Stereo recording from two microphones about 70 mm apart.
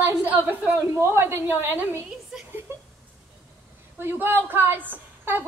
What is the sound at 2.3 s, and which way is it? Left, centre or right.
Speech, centre.